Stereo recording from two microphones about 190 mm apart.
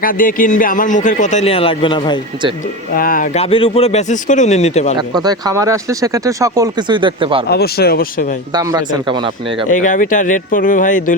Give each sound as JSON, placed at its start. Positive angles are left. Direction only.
{"t": 0.0, "sound": "speech", "side_deg": 45}
{"t": 2.9, "sound": "speech", "side_deg": 50}
{"t": 3.3, "sound": "speech", "side_deg": 30}
{"t": 4.9, "sound": "speech", "side_deg": -20}
{"t": 7.4, "sound": "speech", "side_deg": 55}
{"t": 8.5, "sound": "speech", "side_deg": -20}
{"t": 9.7, "sound": "speech", "side_deg": 40}